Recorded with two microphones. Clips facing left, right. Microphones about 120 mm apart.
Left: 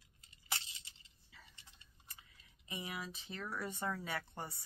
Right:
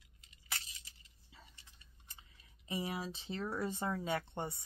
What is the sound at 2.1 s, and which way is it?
Speech, 30° right (ahead or behind).